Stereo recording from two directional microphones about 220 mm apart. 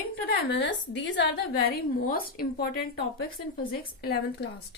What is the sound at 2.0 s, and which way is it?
A woman's voice, 40° left (ahead or behind).